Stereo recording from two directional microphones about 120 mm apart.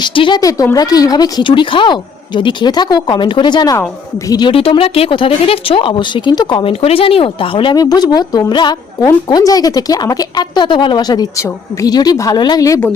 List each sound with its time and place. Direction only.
0.0 s speech: 45° left (ahead or behind)
7.8 s speech: 35° left (ahead or behind)